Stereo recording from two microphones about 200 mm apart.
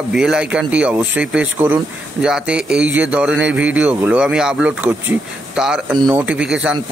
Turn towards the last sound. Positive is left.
turn(degrees=-5)  # may be behind; listen again after turning